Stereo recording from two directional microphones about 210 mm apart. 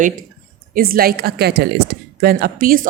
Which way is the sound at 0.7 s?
45° right (ahead or behind).